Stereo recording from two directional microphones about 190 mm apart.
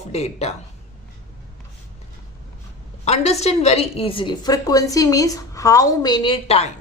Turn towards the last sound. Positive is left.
turn(degrees=30)  # may be behind; listen again after turning